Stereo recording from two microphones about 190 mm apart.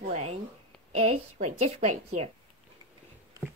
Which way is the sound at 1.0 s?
35° right (ahead or behind).